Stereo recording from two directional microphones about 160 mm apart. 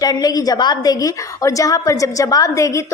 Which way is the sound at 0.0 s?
25° left (ahead or behind).